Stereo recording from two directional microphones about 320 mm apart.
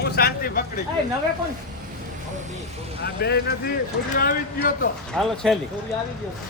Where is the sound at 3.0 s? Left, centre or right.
Left.